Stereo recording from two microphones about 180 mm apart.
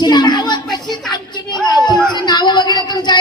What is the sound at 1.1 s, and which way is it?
Speech, 25° left (ahead or behind).